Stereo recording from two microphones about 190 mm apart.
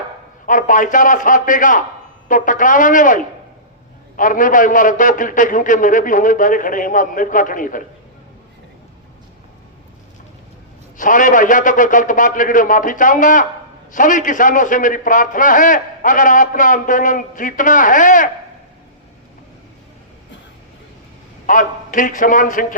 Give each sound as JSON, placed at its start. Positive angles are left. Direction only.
{"t": 0.4, "sound": "a man's voice", "side_deg": 45}
{"t": 10.9, "sound": "a man's voice", "side_deg": 45}
{"t": 21.4, "sound": "a man's voice", "side_deg": 45}